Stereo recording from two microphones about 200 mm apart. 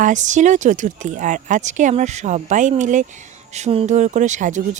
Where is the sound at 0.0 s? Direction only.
40° right (ahead or behind).